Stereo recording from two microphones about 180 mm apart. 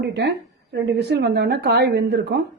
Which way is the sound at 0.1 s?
65° right (ahead or behind).